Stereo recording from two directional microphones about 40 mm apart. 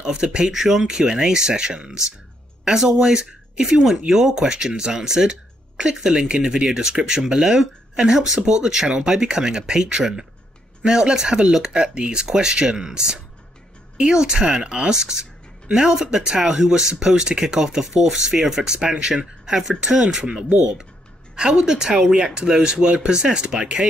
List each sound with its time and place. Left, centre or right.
0.0 s speech: right